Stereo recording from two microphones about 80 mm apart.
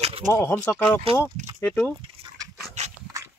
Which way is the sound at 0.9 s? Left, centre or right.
Left.